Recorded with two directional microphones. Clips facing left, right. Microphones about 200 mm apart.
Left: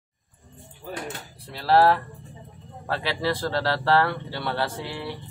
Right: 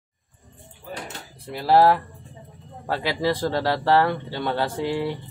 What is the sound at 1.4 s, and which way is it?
Speech, 15° right (ahead or behind).